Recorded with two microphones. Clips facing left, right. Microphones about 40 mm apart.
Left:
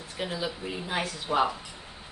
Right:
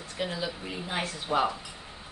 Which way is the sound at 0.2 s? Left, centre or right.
Centre.